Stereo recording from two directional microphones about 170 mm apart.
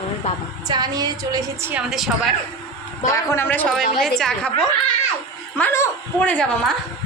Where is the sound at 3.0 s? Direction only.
15° left (ahead or behind).